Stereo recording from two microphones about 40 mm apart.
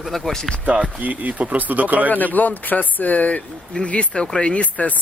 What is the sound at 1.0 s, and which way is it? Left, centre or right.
Speech, right.